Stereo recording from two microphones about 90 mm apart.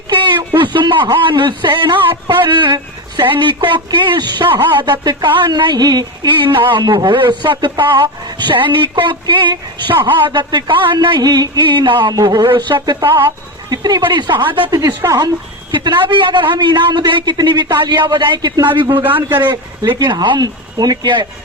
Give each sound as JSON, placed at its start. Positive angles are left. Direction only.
{"t": 0.1, "sound": "a sound", "side_deg": -60}
{"t": 1.2, "sound": "speech", "side_deg": -60}
{"t": 6.8, "sound": "a man's voice", "side_deg": -45}
{"t": 7.1, "sound": "speech", "side_deg": -60}
{"t": 12.1, "sound": "a man's voice", "side_deg": -45}
{"t": 12.5, "sound": "speech", "side_deg": -65}
{"t": 14.8, "sound": "speech", "side_deg": -40}
{"t": 15.7, "sound": "speech", "side_deg": -60}
{"t": 19.1, "sound": "speech", "side_deg": -20}
{"t": 19.5, "sound": "speech", "side_deg": -55}